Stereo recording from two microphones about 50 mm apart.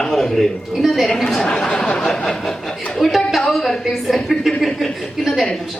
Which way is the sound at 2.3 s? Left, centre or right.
Centre.